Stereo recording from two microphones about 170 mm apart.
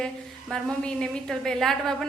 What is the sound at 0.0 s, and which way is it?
A woman's voice, 5° left (ahead or behind).